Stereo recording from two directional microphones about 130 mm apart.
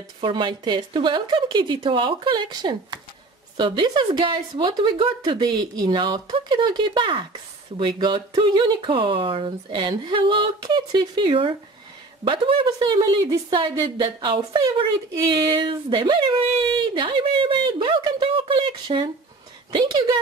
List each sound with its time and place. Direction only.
0.2 s a woman's voice: 35° right (ahead or behind)